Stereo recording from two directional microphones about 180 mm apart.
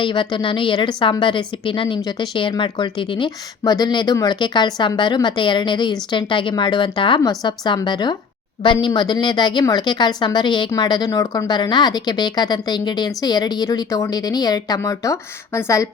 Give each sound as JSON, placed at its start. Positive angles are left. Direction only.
{"t": 0.0, "sound": "a woman's voice", "side_deg": 25}